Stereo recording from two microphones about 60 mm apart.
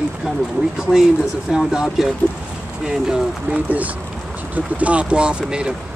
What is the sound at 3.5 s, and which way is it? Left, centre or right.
Speech, right.